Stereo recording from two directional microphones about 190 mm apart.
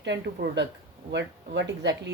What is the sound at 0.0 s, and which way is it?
Speech, 65° right (ahead or behind).